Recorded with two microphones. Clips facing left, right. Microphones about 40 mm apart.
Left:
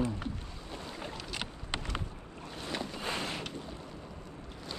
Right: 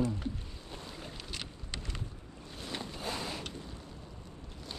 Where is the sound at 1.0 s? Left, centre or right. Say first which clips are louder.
Left 6 dB; left.